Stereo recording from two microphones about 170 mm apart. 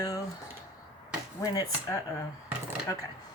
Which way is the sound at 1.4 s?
20° left (ahead or behind).